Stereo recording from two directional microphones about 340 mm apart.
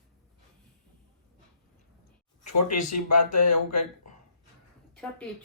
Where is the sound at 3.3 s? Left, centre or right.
Left.